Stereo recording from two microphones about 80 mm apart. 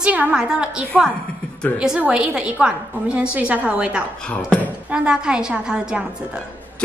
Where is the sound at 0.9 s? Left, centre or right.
Centre.